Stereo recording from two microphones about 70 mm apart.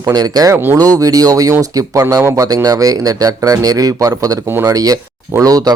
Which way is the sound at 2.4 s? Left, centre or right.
Right.